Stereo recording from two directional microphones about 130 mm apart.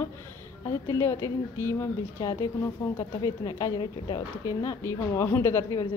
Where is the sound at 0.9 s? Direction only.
25° left (ahead or behind).